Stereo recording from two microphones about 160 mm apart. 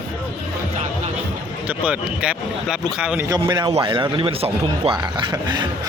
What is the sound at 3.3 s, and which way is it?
A man's voice, 25° right (ahead or behind).